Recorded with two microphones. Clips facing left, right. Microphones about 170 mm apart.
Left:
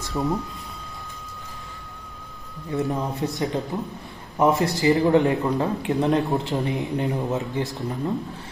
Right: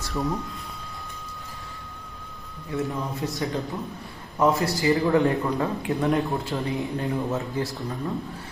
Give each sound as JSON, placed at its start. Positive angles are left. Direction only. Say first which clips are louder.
{"t": 0.1, "sound": "speech", "louder": "left 3 dB", "side_deg": 20}
{"t": 2.7, "sound": "speech", "louder": "left 3 dB", "side_deg": 20}